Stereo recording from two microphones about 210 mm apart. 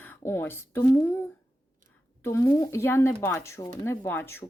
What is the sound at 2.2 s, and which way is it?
Speech, 10° left (ahead or behind).